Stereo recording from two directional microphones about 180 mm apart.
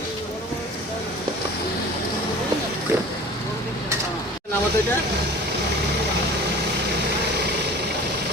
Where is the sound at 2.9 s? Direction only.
15° right (ahead or behind).